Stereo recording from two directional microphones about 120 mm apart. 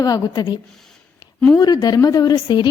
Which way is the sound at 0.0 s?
35° left (ahead or behind).